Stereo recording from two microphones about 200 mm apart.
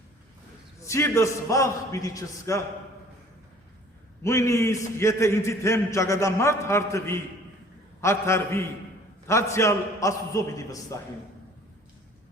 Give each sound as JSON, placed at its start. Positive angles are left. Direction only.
{"t": 0.9, "sound": "a man's voice", "side_deg": 15}
{"t": 4.2, "sound": "a man's voice", "side_deg": 15}